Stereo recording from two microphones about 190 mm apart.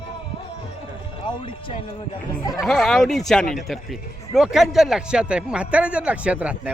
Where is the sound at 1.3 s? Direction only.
25° left (ahead or behind).